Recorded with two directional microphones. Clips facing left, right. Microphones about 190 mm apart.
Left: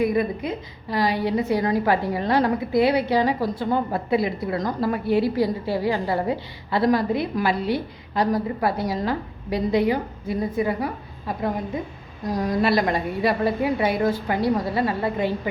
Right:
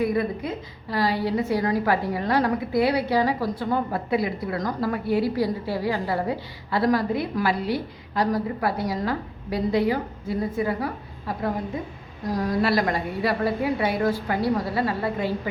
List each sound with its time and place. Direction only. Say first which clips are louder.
0.0 s a woman's voice: left 2 dB; 20° left (ahead or behind)